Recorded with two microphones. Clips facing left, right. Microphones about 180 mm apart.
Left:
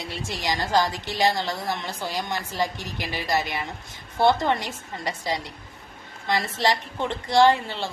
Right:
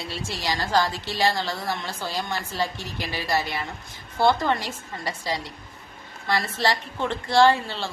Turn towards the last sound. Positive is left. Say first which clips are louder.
# even
turn(degrees=15)  # may be behind; listen again after turning